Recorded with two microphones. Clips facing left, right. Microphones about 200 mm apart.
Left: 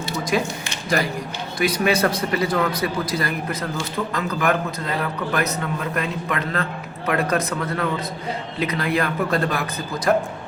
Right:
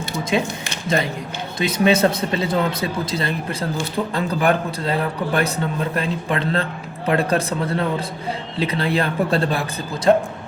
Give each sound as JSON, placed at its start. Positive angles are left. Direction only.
{"t": 0.3, "sound": "a man's voice", "side_deg": -25}
{"t": 1.5, "sound": "a man's voice", "side_deg": -25}